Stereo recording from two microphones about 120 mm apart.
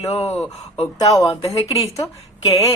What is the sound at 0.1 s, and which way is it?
Speech, 60° left (ahead or behind).